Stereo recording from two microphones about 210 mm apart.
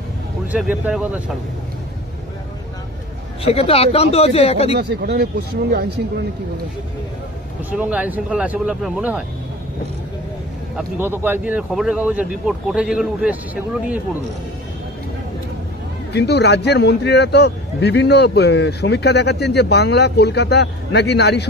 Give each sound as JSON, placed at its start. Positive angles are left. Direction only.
{"t": 0.5, "sound": "speech", "side_deg": -5}
{"t": 3.4, "sound": "speech", "side_deg": 30}
{"t": 4.7, "sound": "speech", "side_deg": -50}
{"t": 7.7, "sound": "speech", "side_deg": -5}
{"t": 10.8, "sound": "speech", "side_deg": -10}
{"t": 16.1, "sound": "speech", "side_deg": 50}